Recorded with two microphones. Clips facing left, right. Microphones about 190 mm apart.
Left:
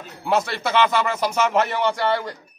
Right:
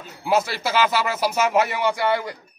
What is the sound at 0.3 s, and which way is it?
A man's voice, centre (ahead or behind).